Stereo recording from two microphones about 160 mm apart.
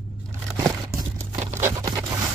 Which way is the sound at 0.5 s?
20° right (ahead or behind).